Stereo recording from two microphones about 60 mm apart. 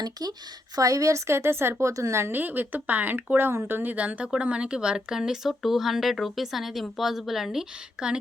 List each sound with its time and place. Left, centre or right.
0.8 s speech: right
1.3 s speech: right
1.8 s a woman's voice: right
2.3 s speech: right
3.9 s speech: right; by 7.6 s centre
8.0 s a woman's voice: centre